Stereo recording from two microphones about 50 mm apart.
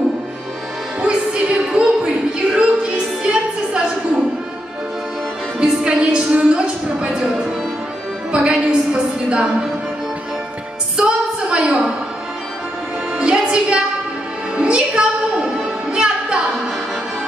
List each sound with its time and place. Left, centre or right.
1.0 s music: centre
5.6 s music: centre
11.0 s a sound: right
13.2 s music: centre